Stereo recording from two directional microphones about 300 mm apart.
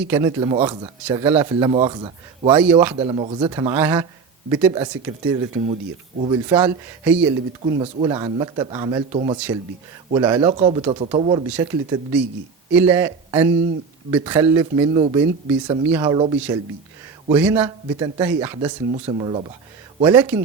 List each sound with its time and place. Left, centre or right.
0.1 s speech: centre
2.5 s speech: centre
2.9 s speech: centre
6.6 s speech: centre
7.6 s speech: centre
18.9 s speech: right
20.0 s speech: centre